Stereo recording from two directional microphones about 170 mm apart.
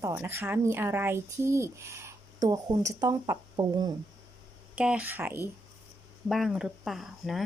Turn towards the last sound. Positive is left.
turn(degrees=0)  # may be behind; listen again after turning